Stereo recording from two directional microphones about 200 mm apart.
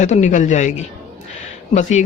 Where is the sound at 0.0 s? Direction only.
40° left (ahead or behind).